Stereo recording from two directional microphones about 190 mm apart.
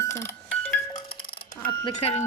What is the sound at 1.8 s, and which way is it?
Speech, 35° left (ahead or behind).